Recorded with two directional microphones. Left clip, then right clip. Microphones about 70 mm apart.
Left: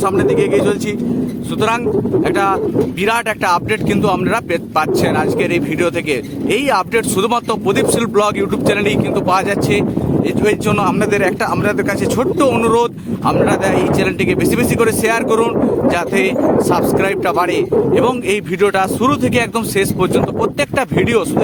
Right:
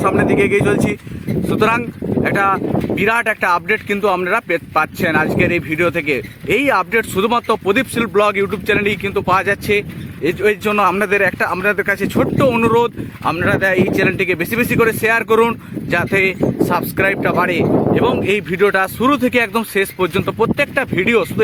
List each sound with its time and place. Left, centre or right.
2.3 s speech: centre; by 7.9 s left
8.1 s speech: left
10.8 s speech: left
12.6 s speech: centre
13.2 s speech: left
19.5 s speech: left